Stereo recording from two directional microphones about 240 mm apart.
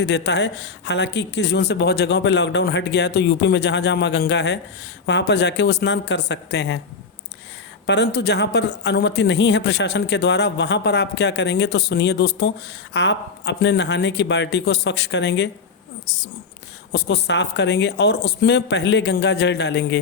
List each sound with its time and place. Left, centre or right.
0.0 s speech: left
7.9 s speech: left